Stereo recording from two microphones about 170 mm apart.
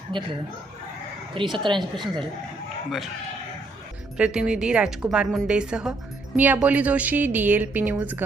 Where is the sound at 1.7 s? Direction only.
Centre (ahead or behind).